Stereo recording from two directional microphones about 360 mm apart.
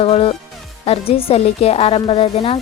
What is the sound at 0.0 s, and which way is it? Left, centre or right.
A woman's voice, centre.